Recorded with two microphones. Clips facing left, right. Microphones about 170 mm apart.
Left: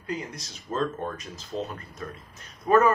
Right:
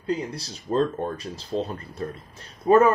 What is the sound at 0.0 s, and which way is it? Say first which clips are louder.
Speech: right 6 dB; 30° right (ahead or behind).